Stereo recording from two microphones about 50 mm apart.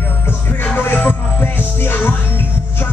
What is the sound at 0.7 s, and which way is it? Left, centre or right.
Music, left.